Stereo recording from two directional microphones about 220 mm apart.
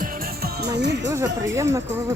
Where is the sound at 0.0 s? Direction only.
40° right (ahead or behind).